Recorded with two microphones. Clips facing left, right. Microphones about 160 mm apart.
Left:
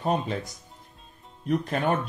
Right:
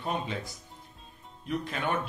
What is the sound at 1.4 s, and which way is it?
Speech, 45° left (ahead or behind).